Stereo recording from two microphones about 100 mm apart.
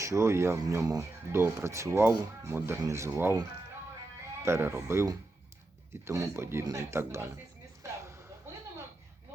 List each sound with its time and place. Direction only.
0.0 s speech: 30° right (ahead or behind)
4.4 s speech: 25° right (ahead or behind)